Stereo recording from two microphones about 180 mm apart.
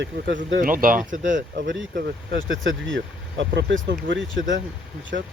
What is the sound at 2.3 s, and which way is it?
Speech, 90° right.